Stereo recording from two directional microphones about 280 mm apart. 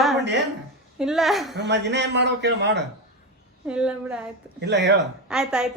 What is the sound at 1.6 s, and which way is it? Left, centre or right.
A man's voice, right.